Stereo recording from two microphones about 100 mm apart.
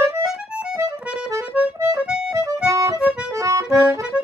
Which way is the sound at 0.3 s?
10° right (ahead or behind).